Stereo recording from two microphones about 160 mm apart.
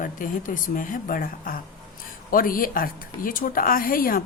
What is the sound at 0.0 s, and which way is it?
Speech, 55° left (ahead or behind).